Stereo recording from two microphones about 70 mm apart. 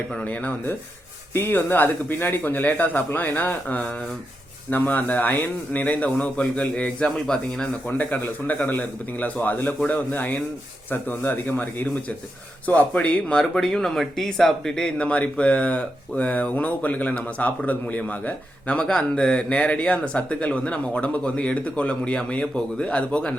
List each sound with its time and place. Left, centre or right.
0.3 s a man's voice: left
7.9 s a man's voice: left